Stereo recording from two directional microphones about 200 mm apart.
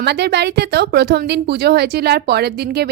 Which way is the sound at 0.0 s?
55° right (ahead or behind).